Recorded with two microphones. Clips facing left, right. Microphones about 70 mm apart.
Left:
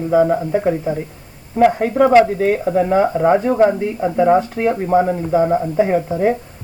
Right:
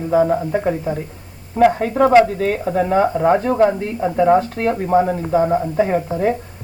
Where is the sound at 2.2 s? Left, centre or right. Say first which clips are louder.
Left 3 dB; centre.